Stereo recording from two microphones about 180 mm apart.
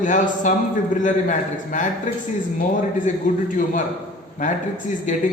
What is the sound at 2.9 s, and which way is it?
A man's voice, 45° left (ahead or behind).